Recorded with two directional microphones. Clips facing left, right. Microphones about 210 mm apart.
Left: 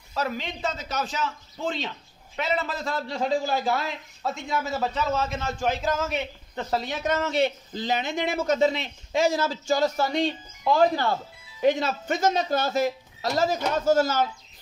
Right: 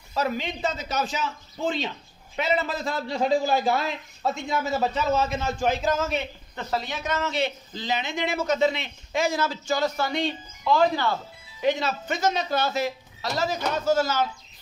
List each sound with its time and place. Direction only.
0.1 s a man's voice: 5° right (ahead or behind)
2.3 s a man's voice: 10° right (ahead or behind)
6.5 s speech: 45° left (ahead or behind)